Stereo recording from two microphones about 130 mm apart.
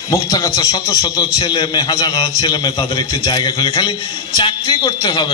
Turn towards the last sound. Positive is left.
turn(degrees=35)  # may be behind; listen again after turning